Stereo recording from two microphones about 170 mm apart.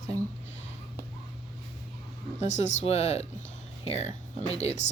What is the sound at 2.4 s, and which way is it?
Speech, 45° left (ahead or behind).